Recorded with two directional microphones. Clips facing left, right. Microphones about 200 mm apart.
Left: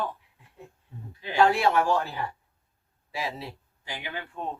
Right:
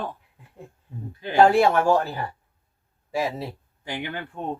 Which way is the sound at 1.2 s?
50° right (ahead or behind).